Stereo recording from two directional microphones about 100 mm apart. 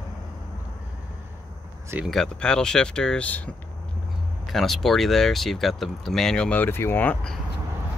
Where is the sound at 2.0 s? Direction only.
5° left (ahead or behind).